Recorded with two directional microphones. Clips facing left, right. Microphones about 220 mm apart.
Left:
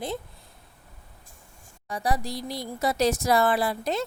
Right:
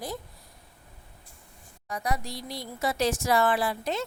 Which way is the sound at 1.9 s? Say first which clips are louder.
Left 4 dB; 30° left (ahead or behind).